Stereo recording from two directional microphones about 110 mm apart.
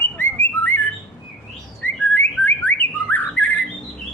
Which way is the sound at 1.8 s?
20° left (ahead or behind).